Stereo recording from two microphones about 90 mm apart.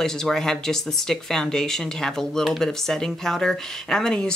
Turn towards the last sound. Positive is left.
turn(degrees=10)  # may be behind; listen again after turning